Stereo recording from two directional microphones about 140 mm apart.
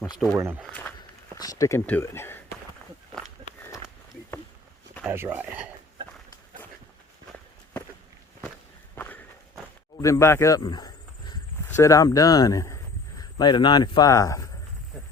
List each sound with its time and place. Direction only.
0.3 s speech: 15° right (ahead or behind)
1.4 s speech: 25° left (ahead or behind)
5.0 s speech: 15° right (ahead or behind)
9.0 s walk: 15° left (ahead or behind)
10.0 s speech: 20° left (ahead or behind)